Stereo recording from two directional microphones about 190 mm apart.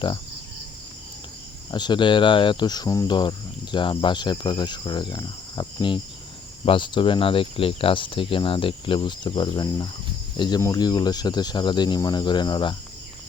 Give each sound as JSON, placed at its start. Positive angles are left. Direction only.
{"t": 1.7, "sound": "speech", "side_deg": 25}